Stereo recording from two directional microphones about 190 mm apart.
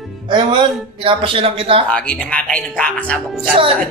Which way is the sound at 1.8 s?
5° left (ahead or behind).